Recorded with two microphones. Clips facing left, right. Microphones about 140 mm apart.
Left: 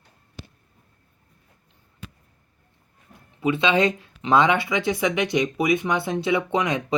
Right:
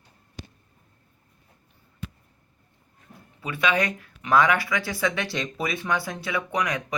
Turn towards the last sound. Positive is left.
turn(degrees=25)  # may be behind; listen again after turning